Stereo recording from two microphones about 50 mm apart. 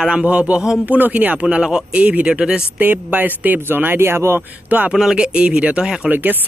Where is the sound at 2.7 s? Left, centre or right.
Right.